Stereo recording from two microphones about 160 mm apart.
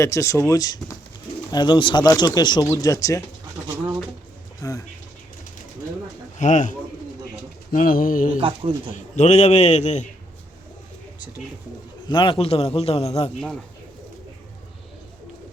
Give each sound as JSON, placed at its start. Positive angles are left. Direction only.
{"t": 0.0, "sound": "speech", "side_deg": 20}
{"t": 4.6, "sound": "speech", "side_deg": 20}
{"t": 6.4, "sound": "a man's voice", "side_deg": 50}
{"t": 7.7, "sound": "speech", "side_deg": 60}
{"t": 8.4, "sound": "speech", "side_deg": -35}
{"t": 9.0, "sound": "a man's voice", "side_deg": 45}
{"t": 12.0, "sound": "a man's voice", "side_deg": 30}